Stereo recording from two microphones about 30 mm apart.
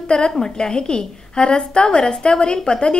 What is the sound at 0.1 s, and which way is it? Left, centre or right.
A woman's voice, left.